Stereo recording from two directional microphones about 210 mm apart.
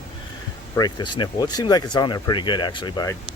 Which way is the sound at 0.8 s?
20° left (ahead or behind).